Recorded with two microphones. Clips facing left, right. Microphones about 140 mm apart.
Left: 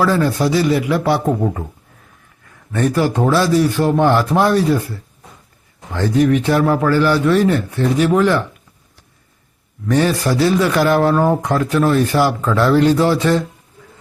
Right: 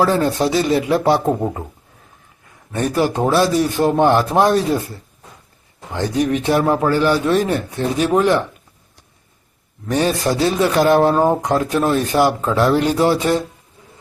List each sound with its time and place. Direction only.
0.0 s speech: 20° right (ahead or behind)
2.7 s speech: 20° right (ahead or behind)
9.9 s speech: 20° right (ahead or behind)